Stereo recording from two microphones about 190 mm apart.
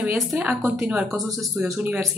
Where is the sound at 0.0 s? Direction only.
5° right (ahead or behind).